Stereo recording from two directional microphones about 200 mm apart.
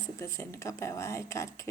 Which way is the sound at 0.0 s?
15° left (ahead or behind).